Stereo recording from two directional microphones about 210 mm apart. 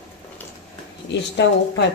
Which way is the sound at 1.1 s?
55° left (ahead or behind).